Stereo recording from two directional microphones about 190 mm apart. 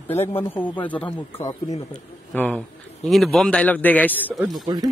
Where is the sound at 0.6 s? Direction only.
25° left (ahead or behind).